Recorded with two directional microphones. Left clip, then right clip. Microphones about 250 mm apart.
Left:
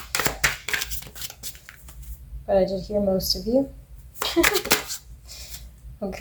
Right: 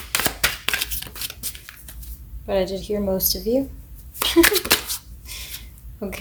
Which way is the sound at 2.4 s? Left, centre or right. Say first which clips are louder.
Left 1 dB; right.